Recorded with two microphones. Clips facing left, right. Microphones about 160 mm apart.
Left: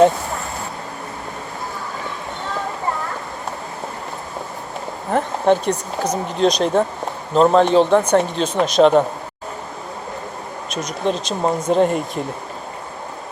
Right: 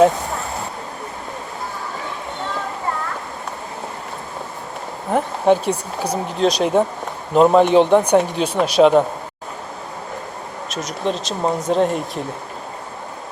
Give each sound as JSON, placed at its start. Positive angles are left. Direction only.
{"t": 5.1, "sound": "speech", "side_deg": -10}
{"t": 10.7, "sound": "speech", "side_deg": 0}